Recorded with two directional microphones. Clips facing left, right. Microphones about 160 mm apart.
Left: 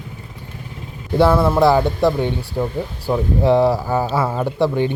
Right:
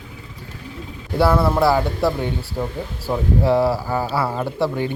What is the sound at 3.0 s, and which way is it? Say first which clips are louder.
Speech: left 2 dB; 20° left (ahead or behind).